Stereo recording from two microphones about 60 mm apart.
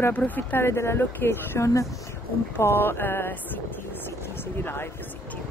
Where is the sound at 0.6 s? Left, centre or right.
Left.